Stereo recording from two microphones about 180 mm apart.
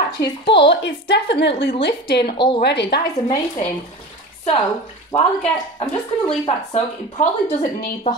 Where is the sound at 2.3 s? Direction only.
25° left (ahead or behind).